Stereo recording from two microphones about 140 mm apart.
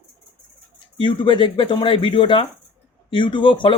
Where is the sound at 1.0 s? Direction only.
35° left (ahead or behind).